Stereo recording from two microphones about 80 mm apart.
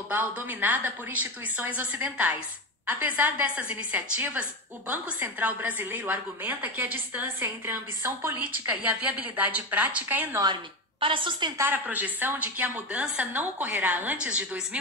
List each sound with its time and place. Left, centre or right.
0.1 s a woman's voice: right
8.6 s a woman's voice: centre
10.4 s a woman's voice: right
11.7 s a woman's voice: right
13.3 s a woman's voice: right